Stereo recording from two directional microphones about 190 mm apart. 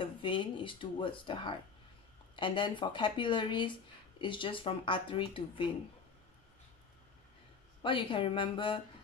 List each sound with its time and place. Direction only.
0.0 s speech: 25° left (ahead or behind)
7.8 s speech: 25° left (ahead or behind)